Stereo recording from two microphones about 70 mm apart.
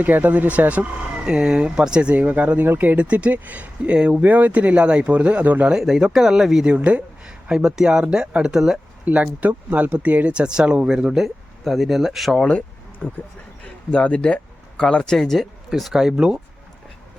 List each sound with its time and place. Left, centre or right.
0.0 s speech: right
5.7 s speech: centre
6.7 s speech: centre
9.0 s speech: right; by 12.4 s centre
12.4 s a sound: centre
13.9 s speech: centre